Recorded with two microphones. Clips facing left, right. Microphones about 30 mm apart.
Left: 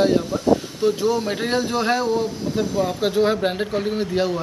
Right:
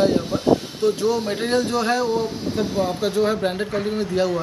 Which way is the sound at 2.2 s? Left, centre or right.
Centre.